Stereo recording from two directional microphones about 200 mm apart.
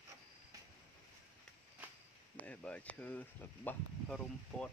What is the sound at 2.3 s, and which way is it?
Speech, 5° left (ahead or behind).